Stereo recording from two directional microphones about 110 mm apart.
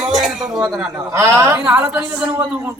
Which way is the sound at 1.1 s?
25° right (ahead or behind).